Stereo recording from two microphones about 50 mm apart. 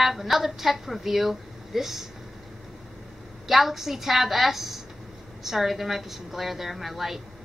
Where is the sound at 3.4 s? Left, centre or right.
Centre.